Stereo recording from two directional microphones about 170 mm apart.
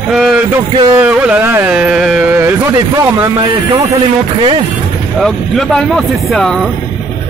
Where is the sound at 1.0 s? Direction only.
10° right (ahead or behind).